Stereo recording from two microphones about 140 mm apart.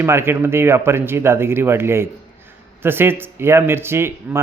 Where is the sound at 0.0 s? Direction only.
20° right (ahead or behind).